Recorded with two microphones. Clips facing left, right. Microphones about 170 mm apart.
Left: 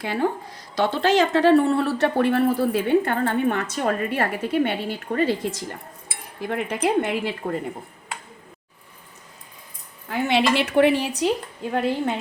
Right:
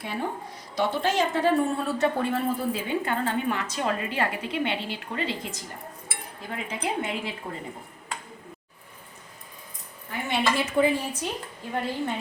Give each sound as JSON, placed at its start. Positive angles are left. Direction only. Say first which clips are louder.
{"t": 0.0, "sound": "a woman's voice", "louder": "left 7 dB", "side_deg": 90}
{"t": 10.1, "sound": "a woman's voice", "louder": "left 6 dB", "side_deg": 85}